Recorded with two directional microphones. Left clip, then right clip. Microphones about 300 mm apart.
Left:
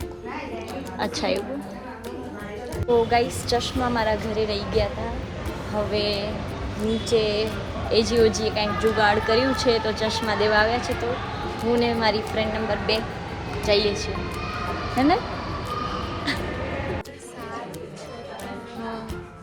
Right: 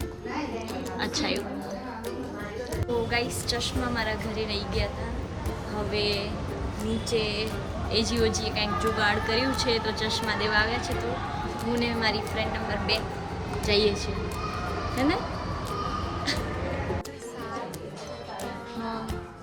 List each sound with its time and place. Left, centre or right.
0.9 s speech: centre
3.1 s speech: centre
5.9 s speech: centre